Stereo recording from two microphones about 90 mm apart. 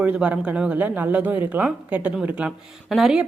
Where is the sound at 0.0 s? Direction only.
15° right (ahead or behind).